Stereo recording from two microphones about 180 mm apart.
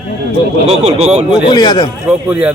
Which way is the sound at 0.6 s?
35° right (ahead or behind).